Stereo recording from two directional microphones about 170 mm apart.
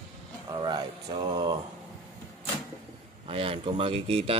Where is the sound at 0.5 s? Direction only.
25° right (ahead or behind).